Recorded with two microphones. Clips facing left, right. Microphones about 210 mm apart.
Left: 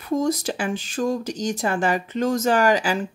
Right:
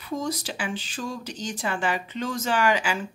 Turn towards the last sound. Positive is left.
turn(degrees=35)  # may be behind; listen again after turning